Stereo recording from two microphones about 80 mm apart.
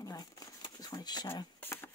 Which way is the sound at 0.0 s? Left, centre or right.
Left.